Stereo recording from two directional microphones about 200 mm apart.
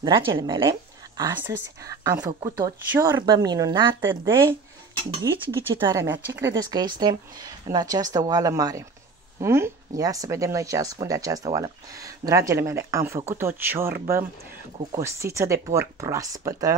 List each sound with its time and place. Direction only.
0.0 s speech: 20° right (ahead or behind)